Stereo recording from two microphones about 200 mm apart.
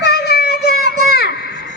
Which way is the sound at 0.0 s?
50° left (ahead or behind).